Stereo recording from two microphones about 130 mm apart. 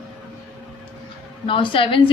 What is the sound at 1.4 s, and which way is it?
Speech, 40° left (ahead or behind).